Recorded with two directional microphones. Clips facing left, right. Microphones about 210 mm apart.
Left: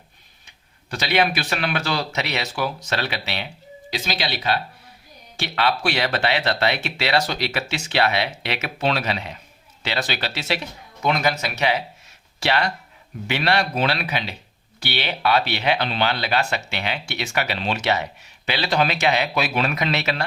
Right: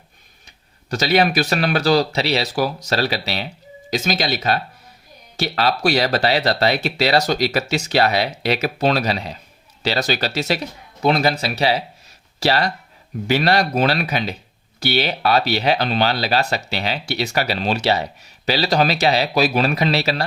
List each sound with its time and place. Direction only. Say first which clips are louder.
0.4 s speech: right 8 dB; 40° right (ahead or behind)